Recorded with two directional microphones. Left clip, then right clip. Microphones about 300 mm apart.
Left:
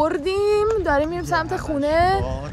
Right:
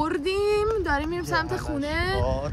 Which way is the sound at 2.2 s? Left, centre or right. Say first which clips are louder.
Right 2 dB; right.